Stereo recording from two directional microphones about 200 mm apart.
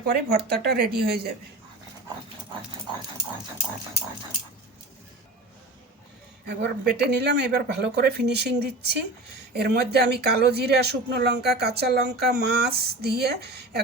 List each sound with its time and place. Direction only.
0.0 s speech: 55° right (ahead or behind)
6.5 s speech: 55° right (ahead or behind)